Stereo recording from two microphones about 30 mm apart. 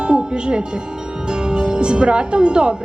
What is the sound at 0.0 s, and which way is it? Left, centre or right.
Music, right.